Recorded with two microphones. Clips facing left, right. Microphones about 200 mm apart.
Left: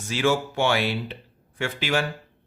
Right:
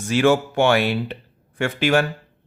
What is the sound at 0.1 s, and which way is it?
Speech, 60° right (ahead or behind).